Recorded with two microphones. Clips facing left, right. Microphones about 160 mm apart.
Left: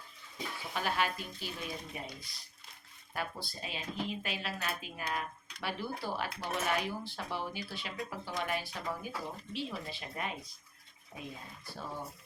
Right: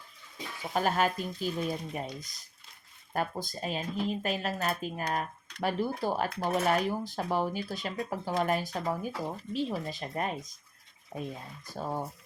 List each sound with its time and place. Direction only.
0.7 s speech: 45° right (ahead or behind)